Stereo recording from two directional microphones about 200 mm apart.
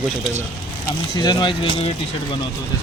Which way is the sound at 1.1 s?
20° left (ahead or behind).